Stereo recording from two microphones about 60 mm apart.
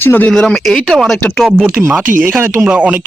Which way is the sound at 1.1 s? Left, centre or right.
Left.